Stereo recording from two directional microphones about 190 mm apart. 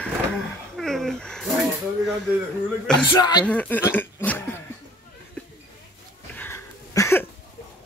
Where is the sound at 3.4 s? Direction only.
10° left (ahead or behind).